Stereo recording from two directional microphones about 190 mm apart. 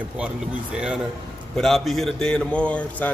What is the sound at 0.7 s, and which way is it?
A man's voice, 5° right (ahead or behind).